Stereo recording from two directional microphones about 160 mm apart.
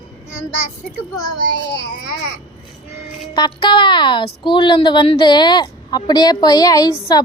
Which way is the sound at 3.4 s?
30° left (ahead or behind).